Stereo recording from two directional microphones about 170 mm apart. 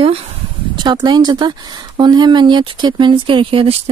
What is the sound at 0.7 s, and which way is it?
Speech, 25° right (ahead or behind).